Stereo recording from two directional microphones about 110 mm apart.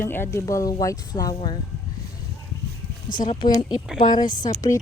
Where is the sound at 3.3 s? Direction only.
45° left (ahead or behind).